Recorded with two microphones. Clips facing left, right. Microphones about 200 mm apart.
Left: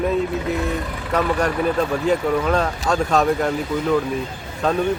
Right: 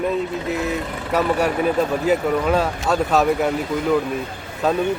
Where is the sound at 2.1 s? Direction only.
5° right (ahead or behind).